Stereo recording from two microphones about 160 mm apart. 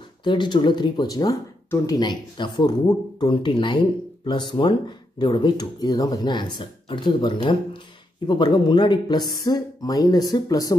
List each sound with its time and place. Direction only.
0.2 s speech: 30° left (ahead or behind)